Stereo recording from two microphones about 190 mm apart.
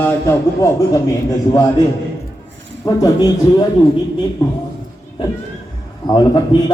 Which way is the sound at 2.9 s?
20° left (ahead or behind).